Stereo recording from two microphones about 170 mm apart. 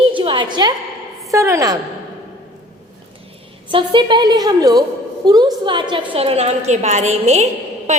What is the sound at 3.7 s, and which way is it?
A woman's voice, 30° right (ahead or behind).